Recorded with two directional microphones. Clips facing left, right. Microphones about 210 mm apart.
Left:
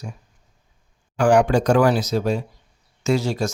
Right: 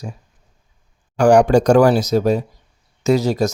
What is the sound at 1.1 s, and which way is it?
Speech, 40° right (ahead or behind).